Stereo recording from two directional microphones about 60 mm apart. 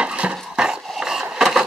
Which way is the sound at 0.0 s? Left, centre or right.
Centre.